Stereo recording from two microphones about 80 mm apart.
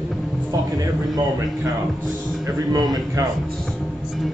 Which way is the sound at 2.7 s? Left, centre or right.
Right.